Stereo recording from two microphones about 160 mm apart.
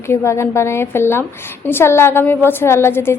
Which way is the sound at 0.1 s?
15° left (ahead or behind).